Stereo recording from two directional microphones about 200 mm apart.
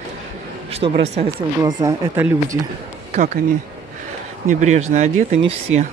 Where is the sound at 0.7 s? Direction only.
30° right (ahead or behind).